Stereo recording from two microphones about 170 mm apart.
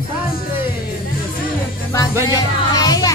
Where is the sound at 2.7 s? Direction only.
20° left (ahead or behind).